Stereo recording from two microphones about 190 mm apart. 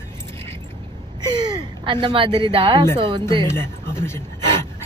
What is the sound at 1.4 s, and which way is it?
Speech, 20° right (ahead or behind).